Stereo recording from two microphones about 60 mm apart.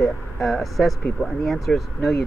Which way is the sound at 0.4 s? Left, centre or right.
Centre.